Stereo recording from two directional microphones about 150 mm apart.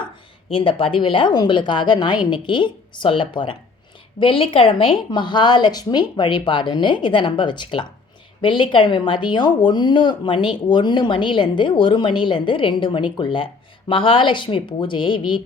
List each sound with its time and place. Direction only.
0.5 s speech: 35° left (ahead or behind)